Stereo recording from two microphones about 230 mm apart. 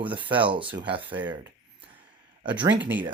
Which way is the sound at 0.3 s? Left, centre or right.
Right.